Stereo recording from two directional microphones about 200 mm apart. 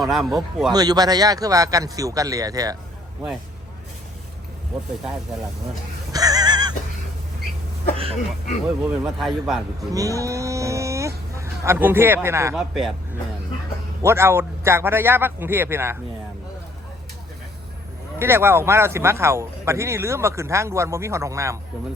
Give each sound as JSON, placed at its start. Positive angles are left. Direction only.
{"t": 0.0, "sound": "a man's voice", "side_deg": 0}
{"t": 0.7, "sound": "speech", "side_deg": -20}
{"t": 6.1, "sound": "a sound", "side_deg": -20}
{"t": 8.6, "sound": "a man's voice", "side_deg": 0}
{"t": 9.9, "sound": "livestock", "side_deg": -15}
{"t": 12.5, "sound": "a man's voice", "side_deg": 0}
{"t": 14.0, "sound": "speech", "side_deg": -15}
{"t": 18.2, "sound": "speech", "side_deg": -10}